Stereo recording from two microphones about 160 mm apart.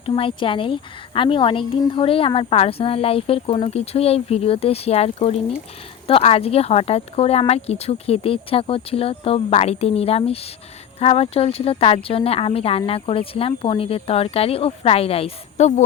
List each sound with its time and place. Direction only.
0.0 s a woman's voice: 35° left (ahead or behind)